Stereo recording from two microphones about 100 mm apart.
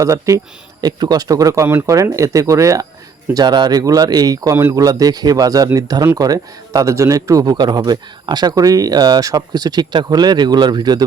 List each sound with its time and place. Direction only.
0.0 s a man's voice: 30° right (ahead or behind)
3.3 s a man's voice: 45° right (ahead or behind)